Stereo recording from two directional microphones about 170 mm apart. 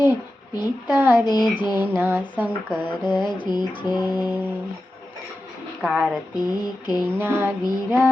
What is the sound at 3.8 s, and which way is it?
Child singing, 25° left (ahead or behind).